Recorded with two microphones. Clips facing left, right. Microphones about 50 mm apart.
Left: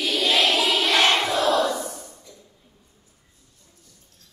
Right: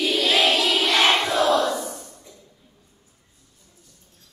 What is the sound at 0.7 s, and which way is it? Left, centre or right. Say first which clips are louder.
Crowd: even; centre.